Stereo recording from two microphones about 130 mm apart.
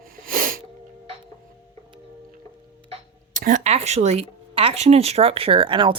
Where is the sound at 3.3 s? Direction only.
90° right; by 5.9 s 40° right (ahead or behind).